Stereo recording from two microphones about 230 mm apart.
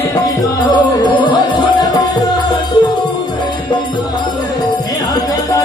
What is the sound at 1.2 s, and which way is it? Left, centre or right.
Music, centre.